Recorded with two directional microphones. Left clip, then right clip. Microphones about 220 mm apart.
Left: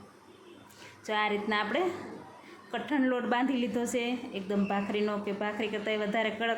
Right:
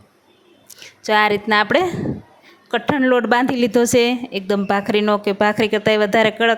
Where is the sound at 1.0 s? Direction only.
45° right (ahead or behind).